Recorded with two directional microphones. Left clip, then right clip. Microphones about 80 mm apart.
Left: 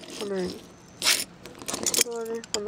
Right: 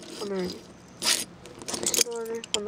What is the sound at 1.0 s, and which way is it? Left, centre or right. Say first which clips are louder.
Zipper: left 2 dB; centre.